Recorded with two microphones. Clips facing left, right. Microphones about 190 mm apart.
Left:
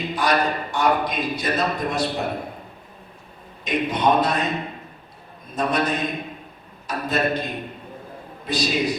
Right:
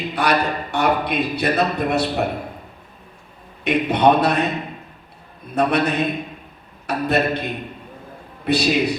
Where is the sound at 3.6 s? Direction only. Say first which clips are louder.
Right 5 dB; 65° right (ahead or behind).